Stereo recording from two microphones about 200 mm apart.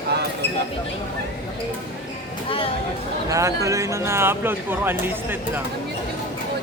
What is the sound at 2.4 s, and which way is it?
Speech, 25° left (ahead or behind).